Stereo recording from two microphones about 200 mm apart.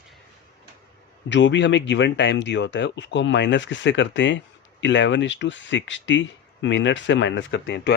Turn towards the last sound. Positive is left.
turn(degrees=60)  # may be behind; listen again after turning